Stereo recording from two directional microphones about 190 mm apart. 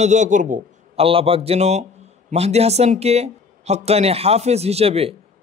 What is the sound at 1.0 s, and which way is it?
A man's voice, 30° right (ahead or behind).